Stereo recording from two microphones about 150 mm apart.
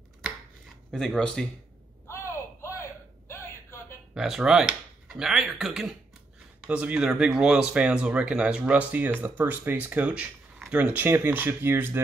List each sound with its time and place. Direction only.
0.9 s speech: 5° left (ahead or behind)
2.6 s a sound: 15° left (ahead or behind)
4.1 s speech: 5° right (ahead or behind)